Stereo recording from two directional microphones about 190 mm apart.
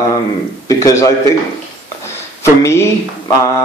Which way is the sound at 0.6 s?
15° left (ahead or behind).